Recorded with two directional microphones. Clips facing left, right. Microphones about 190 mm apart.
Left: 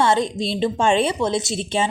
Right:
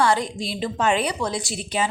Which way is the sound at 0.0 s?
25° left (ahead or behind).